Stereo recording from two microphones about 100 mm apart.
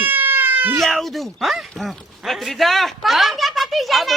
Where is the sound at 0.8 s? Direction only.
Centre (ahead or behind).